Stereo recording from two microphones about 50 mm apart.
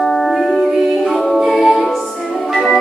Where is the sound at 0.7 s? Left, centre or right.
Centre.